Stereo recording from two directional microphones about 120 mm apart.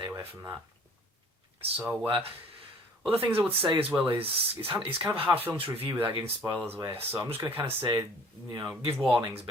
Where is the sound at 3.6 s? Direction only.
45° right (ahead or behind).